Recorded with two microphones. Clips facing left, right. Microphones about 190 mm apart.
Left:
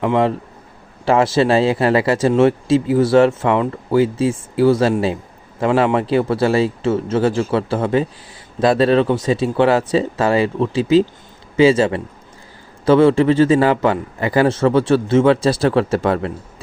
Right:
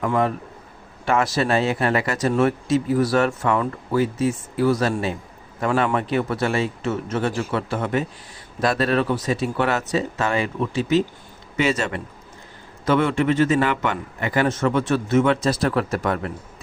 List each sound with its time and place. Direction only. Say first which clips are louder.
0.0 s a man's voice: left 5 dB; 25° left (ahead or behind)